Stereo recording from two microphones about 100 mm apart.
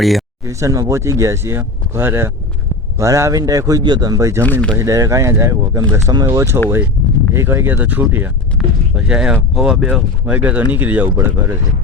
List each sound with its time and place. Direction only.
0.4 s speech: 30° right (ahead or behind)
4.4 s speech: 15° left (ahead or behind)
4.8 s speech: 30° right (ahead or behind)